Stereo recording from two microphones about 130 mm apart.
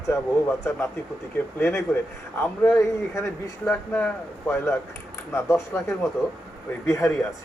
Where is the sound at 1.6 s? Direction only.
20° left (ahead or behind).